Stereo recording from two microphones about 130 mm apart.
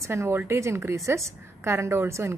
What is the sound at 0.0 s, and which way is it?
A woman's voice, 20° right (ahead or behind).